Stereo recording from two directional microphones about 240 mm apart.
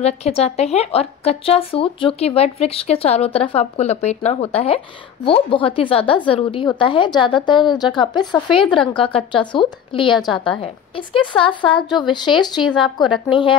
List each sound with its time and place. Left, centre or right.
0.0 s speech: left